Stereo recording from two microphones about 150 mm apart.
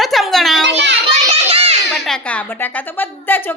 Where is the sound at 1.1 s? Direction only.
40° right (ahead or behind).